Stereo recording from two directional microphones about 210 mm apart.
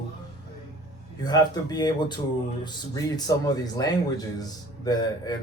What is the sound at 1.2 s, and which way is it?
Speech, 20° left (ahead or behind).